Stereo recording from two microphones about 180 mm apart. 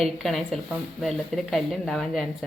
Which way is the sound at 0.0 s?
Centre (ahead or behind).